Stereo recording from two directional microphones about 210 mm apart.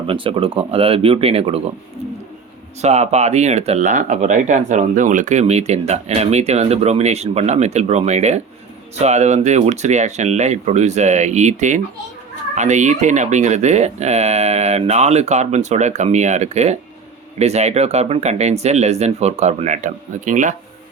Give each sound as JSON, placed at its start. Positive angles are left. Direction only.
{"t": 0.1, "sound": "speech", "side_deg": -25}
{"t": 2.8, "sound": "speech", "side_deg": -30}